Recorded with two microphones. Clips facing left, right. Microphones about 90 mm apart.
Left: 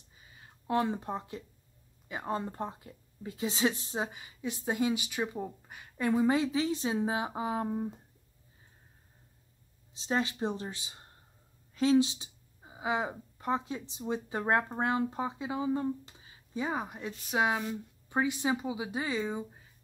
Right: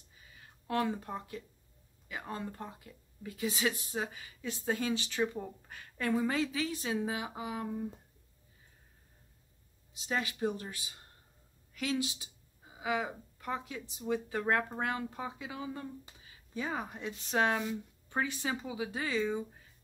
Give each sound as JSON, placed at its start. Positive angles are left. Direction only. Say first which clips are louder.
{"t": 0.2, "sound": "a sound", "louder": "left 1 dB", "side_deg": 25}
{"t": 2.0, "sound": "speech", "louder": "left 5 dB", "side_deg": 30}
{"t": 9.9, "sound": "speech", "louder": "left 4 dB", "side_deg": 30}